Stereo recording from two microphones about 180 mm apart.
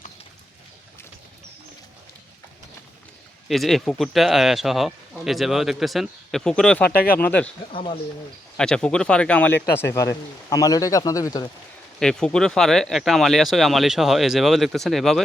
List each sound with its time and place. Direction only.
3.5 s speech: centre (ahead or behind)
6.9 s speech: 55° left (ahead or behind)
7.2 s speech: 10° left (ahead or behind)
7.7 s speech: 30° left (ahead or behind)
8.5 s speech: 5° left (ahead or behind)
9.9 s speech: 20° left (ahead or behind)
11.9 s speech: 5° left (ahead or behind)